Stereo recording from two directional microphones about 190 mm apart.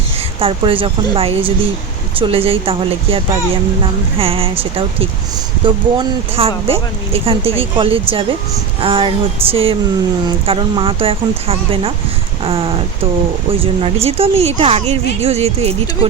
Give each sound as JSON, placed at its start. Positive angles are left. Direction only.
{"t": 0.3, "sound": "speech", "side_deg": -30}
{"t": 4.2, "sound": "speech", "side_deg": -30}